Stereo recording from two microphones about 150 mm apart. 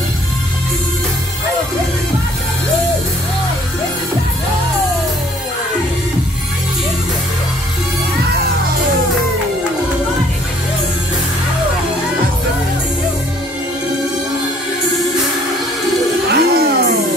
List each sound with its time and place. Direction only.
16.3 s music: 90° right